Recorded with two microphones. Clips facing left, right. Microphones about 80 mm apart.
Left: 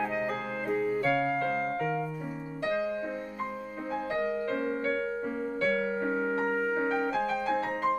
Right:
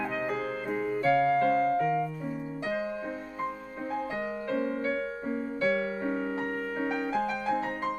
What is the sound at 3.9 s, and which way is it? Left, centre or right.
Music, centre.